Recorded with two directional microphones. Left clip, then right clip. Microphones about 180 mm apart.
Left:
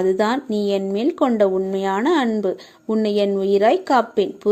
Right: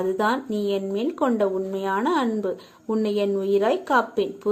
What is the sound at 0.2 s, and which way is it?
Speech, 35° left (ahead or behind).